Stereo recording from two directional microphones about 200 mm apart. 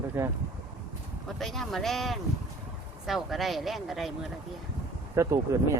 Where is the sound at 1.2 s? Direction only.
Centre (ahead or behind).